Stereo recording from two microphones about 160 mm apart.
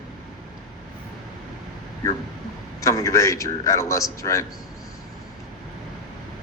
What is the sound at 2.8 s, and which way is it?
A man's voice, 20° left (ahead or behind).